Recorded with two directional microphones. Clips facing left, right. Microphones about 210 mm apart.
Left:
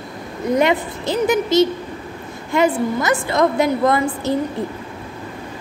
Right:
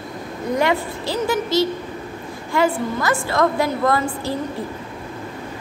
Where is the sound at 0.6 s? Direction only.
20° left (ahead or behind).